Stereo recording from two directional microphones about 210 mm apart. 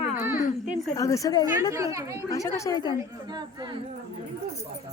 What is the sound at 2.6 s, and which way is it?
Speech, 15° left (ahead or behind).